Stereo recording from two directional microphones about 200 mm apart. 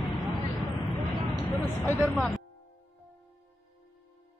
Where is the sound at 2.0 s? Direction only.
Centre (ahead or behind).